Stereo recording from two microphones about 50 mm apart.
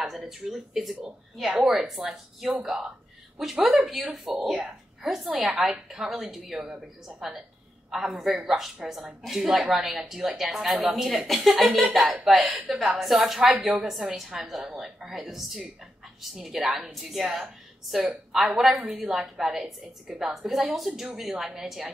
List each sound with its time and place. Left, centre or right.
0.0 s a woman's voice: centre
12.0 s speech: centre
12.3 s a woman's voice: centre